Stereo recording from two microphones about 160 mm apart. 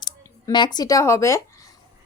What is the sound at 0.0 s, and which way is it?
Speech, 30° left (ahead or behind).